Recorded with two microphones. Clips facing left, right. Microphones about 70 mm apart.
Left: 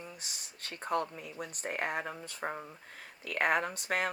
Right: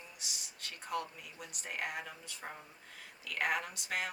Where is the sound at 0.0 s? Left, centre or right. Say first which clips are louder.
Left 4 dB; left.